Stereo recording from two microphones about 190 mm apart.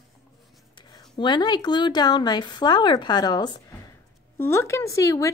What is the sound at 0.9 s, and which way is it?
A woman's voice, 25° left (ahead or behind).